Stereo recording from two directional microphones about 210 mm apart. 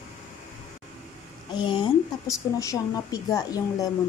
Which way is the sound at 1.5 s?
20° left (ahead or behind).